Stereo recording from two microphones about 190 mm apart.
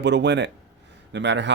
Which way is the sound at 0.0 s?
65° right (ahead or behind).